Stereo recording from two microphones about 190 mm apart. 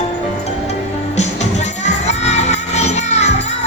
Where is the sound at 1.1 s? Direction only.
35° left (ahead or behind).